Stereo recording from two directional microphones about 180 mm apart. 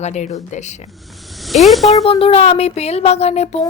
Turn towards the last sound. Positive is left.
turn(degrees=35)  # may be behind; listen again after turning